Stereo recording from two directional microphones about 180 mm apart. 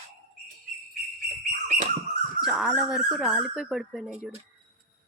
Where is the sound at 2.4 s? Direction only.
Centre (ahead or behind).